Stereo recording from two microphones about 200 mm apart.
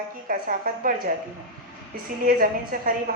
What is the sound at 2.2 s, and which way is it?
Speech, 45° right (ahead or behind).